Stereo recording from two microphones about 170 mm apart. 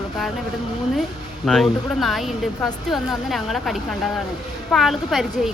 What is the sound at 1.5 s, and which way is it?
A woman's voice, centre (ahead or behind).